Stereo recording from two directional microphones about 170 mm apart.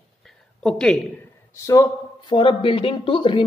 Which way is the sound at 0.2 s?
5° left (ahead or behind).